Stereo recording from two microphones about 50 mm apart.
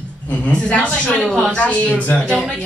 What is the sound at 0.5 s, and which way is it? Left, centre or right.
Speech, left.